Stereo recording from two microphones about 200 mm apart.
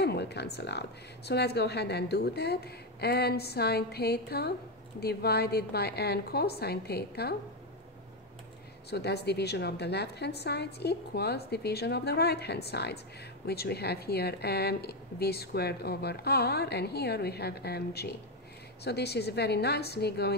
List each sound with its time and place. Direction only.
0.0 s a woman's voice: 55° left (ahead or behind)
8.9 s a woman's voice: 55° left (ahead or behind)